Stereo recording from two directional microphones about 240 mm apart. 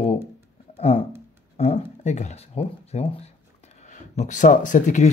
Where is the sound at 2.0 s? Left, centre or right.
Left.